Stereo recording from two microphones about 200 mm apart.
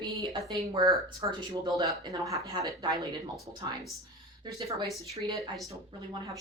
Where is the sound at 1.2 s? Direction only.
15° right (ahead or behind).